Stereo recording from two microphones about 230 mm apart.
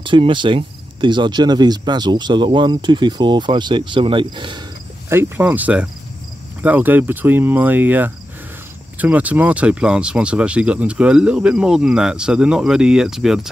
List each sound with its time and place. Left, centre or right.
0.0 s speech: right
5.1 s speech: centre